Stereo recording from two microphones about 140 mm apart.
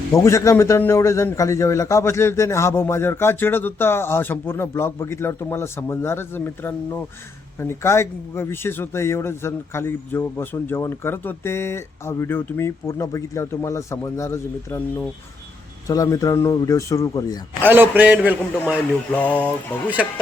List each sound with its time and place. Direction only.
0.1 s a man's voice: 20° left (ahead or behind)
17.6 s a man's voice: 15° right (ahead or behind)
19.1 s speech: 10° left (ahead or behind)